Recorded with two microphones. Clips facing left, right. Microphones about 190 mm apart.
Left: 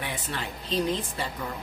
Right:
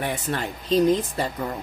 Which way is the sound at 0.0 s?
50° right (ahead or behind).